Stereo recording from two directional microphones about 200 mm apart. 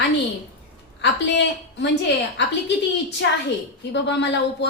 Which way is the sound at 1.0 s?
60° left (ahead or behind).